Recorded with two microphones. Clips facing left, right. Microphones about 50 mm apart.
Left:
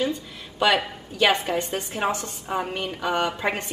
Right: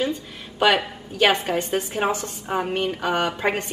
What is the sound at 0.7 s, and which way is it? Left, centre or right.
A woman's voice, centre.